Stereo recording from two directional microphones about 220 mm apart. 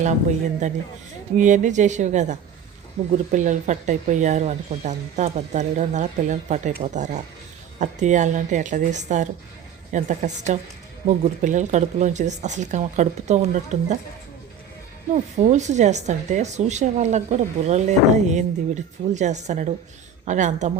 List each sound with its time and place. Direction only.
0.6 s speech: 35° right (ahead or behind)
15.1 s speech: 30° right (ahead or behind)